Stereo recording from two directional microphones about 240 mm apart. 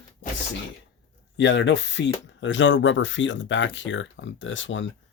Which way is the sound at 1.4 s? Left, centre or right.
Left.